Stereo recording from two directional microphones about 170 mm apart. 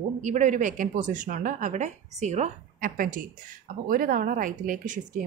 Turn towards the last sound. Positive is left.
turn(degrees=-50)  # may be behind; listen again after turning